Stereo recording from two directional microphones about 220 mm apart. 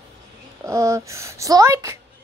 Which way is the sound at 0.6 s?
15° right (ahead or behind).